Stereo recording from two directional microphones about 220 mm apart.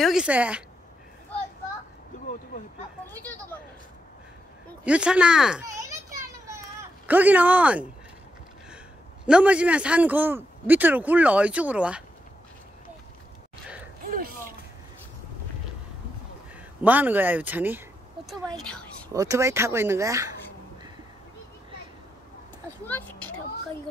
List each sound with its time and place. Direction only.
0.0 s speech: 5° right (ahead or behind)
3.1 s speech: 10° left (ahead or behind)
4.8 s speech: 5° right (ahead or behind)
5.9 s children playing: 15° right (ahead or behind)
7.1 s a man's voice: 5° right (ahead or behind)
9.2 s a man's voice: 5° right (ahead or behind)
14.0 s a sound: 40° right (ahead or behind)
16.8 s a man's voice: 5° right (ahead or behind)
18.6 s speech: 5° left (ahead or behind)
19.1 s a man's voice: 15° right (ahead or behind)